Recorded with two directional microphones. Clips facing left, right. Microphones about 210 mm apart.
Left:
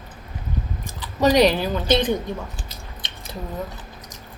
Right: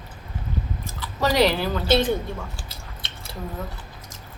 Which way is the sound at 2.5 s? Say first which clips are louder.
Left 2 dB; 20° left (ahead or behind).